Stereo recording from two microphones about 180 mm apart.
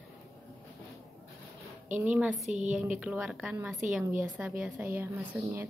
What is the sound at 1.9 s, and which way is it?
A woman's voice, 10° right (ahead or behind).